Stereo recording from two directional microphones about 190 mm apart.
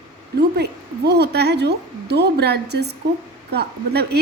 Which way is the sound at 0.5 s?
60° right (ahead or behind).